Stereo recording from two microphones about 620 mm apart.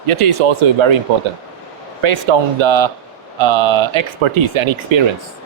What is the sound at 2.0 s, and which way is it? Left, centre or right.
Speech, right.